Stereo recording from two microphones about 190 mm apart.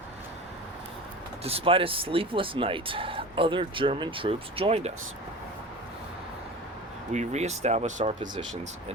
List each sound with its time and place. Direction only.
1.5 s speech: 30° right (ahead or behind)
7.1 s speech: 35° right (ahead or behind)